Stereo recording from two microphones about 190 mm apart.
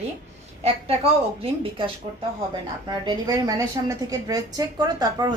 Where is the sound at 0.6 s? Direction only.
30° right (ahead or behind).